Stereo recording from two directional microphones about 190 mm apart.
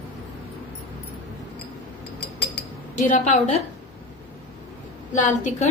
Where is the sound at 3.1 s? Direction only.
45° left (ahead or behind).